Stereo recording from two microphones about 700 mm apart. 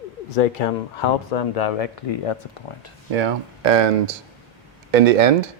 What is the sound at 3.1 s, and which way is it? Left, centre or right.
Speech, right.